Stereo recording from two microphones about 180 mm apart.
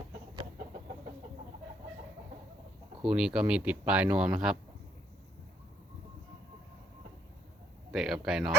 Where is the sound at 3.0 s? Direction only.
5° right (ahead or behind).